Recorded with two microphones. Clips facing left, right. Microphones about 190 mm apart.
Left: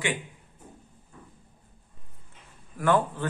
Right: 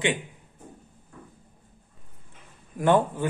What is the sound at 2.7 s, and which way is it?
Speech, 20° right (ahead or behind).